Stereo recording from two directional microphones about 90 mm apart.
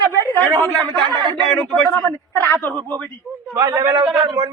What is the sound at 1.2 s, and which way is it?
Speech, 60° right (ahead or behind).